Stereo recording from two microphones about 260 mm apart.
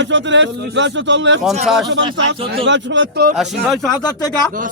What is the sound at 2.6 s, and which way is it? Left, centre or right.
Speech, right.